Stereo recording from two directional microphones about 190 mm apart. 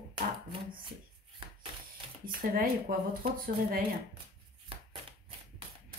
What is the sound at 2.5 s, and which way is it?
Speech, 50° right (ahead or behind).